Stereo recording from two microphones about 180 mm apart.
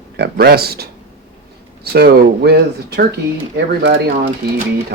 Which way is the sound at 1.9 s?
60° right (ahead or behind).